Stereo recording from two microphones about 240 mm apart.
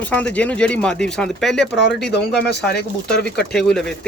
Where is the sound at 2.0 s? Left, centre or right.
Left.